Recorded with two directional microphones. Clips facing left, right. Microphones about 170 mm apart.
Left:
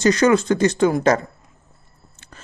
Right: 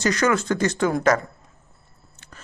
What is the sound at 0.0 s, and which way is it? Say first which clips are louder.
Speech: left 6 dB; 25° left (ahead or behind).